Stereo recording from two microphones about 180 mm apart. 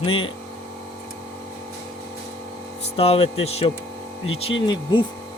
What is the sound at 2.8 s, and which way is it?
A man's voice, 35° left (ahead or behind).